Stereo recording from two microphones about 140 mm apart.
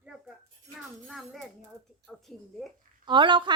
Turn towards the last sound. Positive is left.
turn(degrees=-35)  # may be behind; listen again after turning